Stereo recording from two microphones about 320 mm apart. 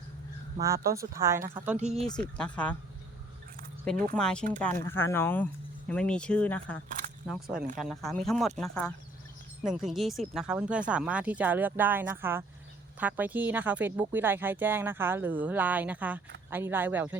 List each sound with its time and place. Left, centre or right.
0.6 s speech: centre
1.8 s speech: centre
2.0 s speech: centre
4.1 s speech: centre